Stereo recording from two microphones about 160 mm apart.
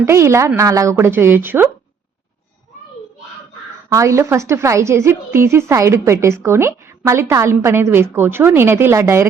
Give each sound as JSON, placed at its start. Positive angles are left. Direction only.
{"t": 0.0, "sound": "a woman's voice", "side_deg": -15}
{"t": 3.8, "sound": "a woman's voice", "side_deg": -20}